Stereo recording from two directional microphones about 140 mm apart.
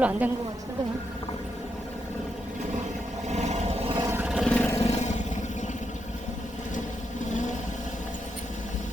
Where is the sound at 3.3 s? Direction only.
55° right (ahead or behind).